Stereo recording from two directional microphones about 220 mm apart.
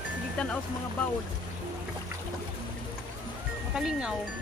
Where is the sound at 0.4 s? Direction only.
5° left (ahead or behind).